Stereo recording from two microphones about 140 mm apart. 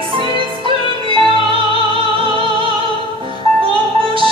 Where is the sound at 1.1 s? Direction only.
35° right (ahead or behind).